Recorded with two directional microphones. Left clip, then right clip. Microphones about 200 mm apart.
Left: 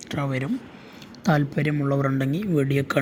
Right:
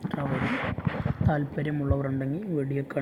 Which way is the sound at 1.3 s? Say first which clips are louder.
Left 7 dB; 25° left (ahead or behind).